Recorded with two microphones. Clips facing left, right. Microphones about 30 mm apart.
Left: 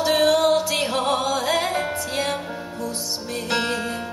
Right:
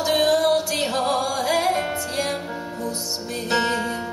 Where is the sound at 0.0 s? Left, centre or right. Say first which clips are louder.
Left 1 dB; centre.